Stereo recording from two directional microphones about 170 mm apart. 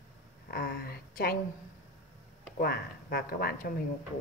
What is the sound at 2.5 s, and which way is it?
A woman's voice, 60° left (ahead or behind).